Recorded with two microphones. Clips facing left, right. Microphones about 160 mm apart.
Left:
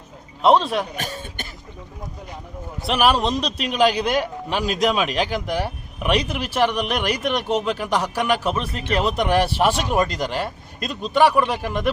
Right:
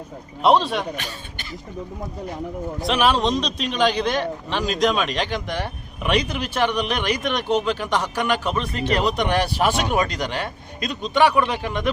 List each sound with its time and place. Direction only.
0.4 s a man's voice: centre (ahead or behind)
0.9 s speech: 45° left (ahead or behind)
2.8 s a man's voice: 5° left (ahead or behind)